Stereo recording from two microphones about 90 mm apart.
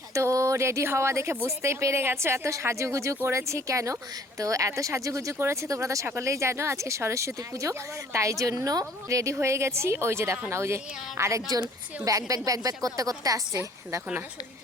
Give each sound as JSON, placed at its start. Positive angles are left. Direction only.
{"t": 0.1, "sound": "speech", "side_deg": -35}